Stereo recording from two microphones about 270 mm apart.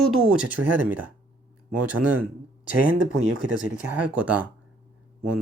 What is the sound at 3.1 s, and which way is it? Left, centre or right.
Speech, right.